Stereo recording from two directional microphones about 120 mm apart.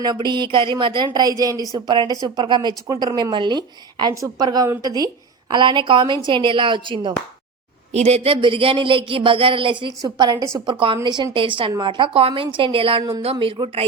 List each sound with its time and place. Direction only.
0.0 s a woman's voice: 35° right (ahead or behind)
7.9 s speech: 60° right (ahead or behind)
10.0 s a woman's voice: 35° right (ahead or behind)
10.7 s speech: 45° right (ahead or behind)